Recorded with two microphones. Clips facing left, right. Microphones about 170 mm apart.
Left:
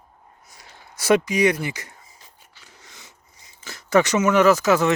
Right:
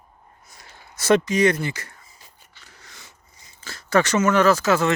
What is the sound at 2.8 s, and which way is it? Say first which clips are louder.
Dog: even; 15° left (ahead or behind).